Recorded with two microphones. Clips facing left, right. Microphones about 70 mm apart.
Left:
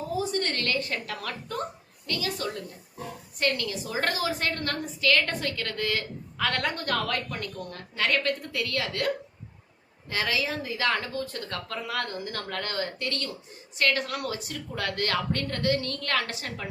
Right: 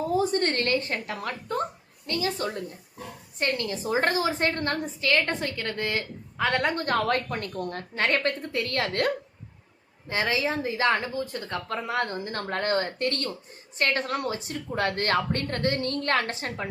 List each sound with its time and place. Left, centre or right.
0.1 s a woman's voice: right
10.1 s a woman's voice: right